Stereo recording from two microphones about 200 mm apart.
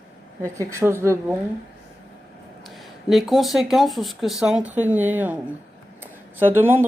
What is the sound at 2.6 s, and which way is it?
Speech, centre (ahead or behind).